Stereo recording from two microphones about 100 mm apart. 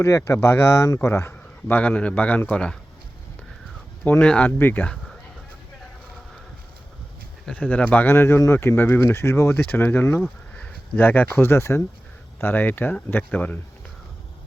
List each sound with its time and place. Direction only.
0.0 s speech: 30° left (ahead or behind); by 2.7 s 15° left (ahead or behind)
4.2 s speech: 10° left (ahead or behind)
7.4 s speech: 15° left (ahead or behind)
10.2 s speech: 15° left (ahead or behind)